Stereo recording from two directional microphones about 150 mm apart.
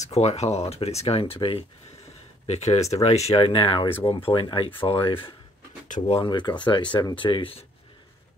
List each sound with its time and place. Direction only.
0.0 s speech: 45° left (ahead or behind)
5.9 s speech: 55° left (ahead or behind)
6.1 s speech: 30° left (ahead or behind)